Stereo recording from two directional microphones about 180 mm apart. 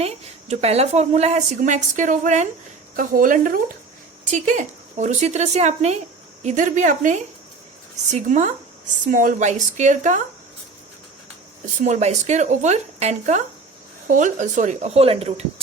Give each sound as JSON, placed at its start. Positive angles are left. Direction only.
{"t": 0.0, "sound": "a woman's voice", "side_deg": -35}
{"t": 11.8, "sound": "a woman's voice", "side_deg": -40}